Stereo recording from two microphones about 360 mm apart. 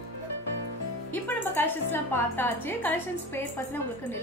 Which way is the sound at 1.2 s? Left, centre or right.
Centre.